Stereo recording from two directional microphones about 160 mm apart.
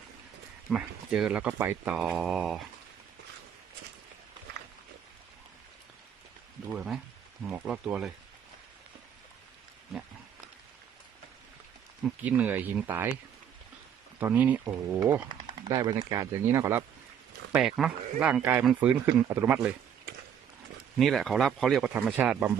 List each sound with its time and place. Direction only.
0.7 s speech: 5° right (ahead or behind)
6.7 s speech: 5° right (ahead or behind)
12.0 s speech: 10° right (ahead or behind)
14.2 s speech: 10° right (ahead or behind)
17.5 s speech: 5° right (ahead or behind)
21.0 s speech: centre (ahead or behind)
21.9 s speech: 10° right (ahead or behind)